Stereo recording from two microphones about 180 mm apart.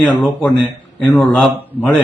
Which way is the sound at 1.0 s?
Centre (ahead or behind).